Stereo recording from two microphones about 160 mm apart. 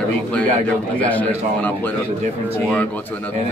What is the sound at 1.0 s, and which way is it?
Speech, 10° left (ahead or behind).